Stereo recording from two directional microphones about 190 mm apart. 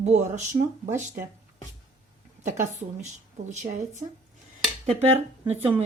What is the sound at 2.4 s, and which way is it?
Speech, 40° right (ahead or behind).